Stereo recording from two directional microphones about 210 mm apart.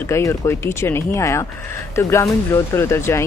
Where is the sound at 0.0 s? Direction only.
15° left (ahead or behind).